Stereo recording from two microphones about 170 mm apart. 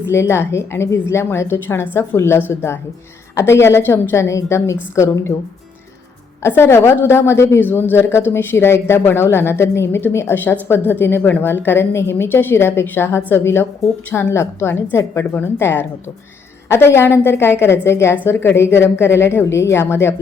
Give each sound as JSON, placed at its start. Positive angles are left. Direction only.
{"t": 0.1, "sound": "speech", "side_deg": 15}
{"t": 6.4, "sound": "speech", "side_deg": 15}